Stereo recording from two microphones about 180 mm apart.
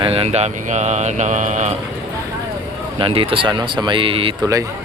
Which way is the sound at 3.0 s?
30° right (ahead or behind).